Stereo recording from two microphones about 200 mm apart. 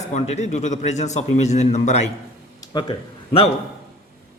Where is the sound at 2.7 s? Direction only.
20° left (ahead or behind).